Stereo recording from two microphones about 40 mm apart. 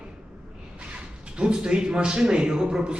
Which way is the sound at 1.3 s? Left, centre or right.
Right.